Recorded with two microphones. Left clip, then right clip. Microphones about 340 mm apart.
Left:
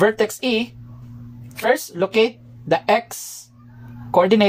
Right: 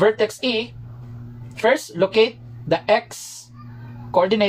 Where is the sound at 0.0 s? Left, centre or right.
Left.